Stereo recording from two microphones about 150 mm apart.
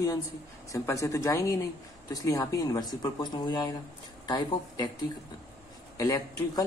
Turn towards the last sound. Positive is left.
turn(degrees=25)  # may be behind; listen again after turning